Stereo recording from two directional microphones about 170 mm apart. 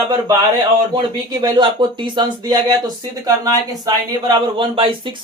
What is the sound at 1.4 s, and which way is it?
Speech, 25° right (ahead or behind).